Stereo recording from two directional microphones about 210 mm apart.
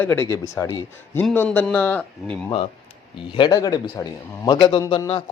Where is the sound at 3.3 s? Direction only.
20° left (ahead or behind).